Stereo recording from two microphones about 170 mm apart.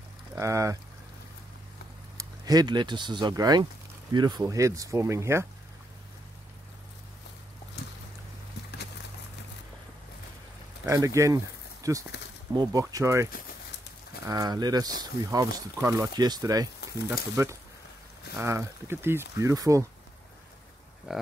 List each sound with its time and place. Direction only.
0.4 s speech: 20° right (ahead or behind)
2.1 s speech: 25° right (ahead or behind)
10.9 s speech: 20° right (ahead or behind)
21.1 s speech: 5° right (ahead or behind)